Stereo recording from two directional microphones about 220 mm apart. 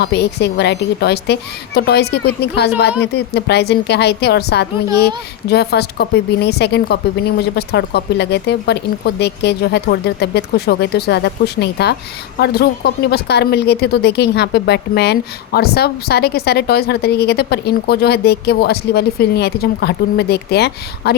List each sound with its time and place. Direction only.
0.0 s speech: 50° left (ahead or behind)